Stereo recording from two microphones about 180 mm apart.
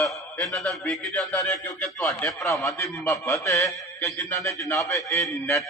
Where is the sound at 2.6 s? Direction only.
15° left (ahead or behind).